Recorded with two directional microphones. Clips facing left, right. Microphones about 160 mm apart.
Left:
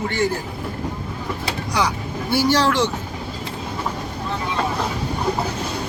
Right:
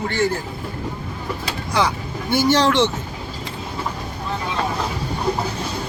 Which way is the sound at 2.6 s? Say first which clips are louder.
Right 2 dB; 25° right (ahead or behind).